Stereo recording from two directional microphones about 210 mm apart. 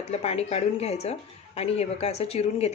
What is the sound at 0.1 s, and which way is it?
A woman's voice, 30° left (ahead or behind).